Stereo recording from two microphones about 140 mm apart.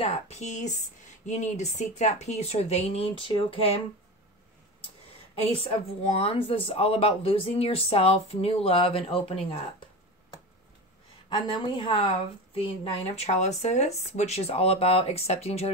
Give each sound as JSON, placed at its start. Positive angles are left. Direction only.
{"t": 0.0, "sound": "speech", "side_deg": 50}
{"t": 5.6, "sound": "speech", "side_deg": 45}
{"t": 11.2, "sound": "a woman's voice", "side_deg": 35}